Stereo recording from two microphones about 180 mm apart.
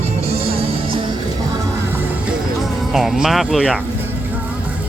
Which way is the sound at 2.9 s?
Centre (ahead or behind).